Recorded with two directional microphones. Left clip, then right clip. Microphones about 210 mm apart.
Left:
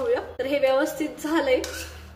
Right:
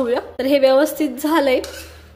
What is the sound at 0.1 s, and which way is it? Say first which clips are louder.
A woman's voice: right 7 dB; 45° right (ahead or behind).